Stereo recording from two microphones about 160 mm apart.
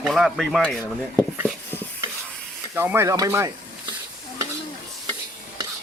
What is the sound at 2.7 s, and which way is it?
Speech, 15° right (ahead or behind).